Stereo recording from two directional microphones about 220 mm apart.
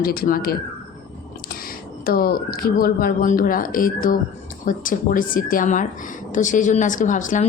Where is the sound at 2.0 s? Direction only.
40° left (ahead or behind).